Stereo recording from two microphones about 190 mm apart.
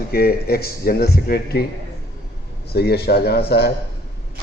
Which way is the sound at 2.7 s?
55° left (ahead or behind).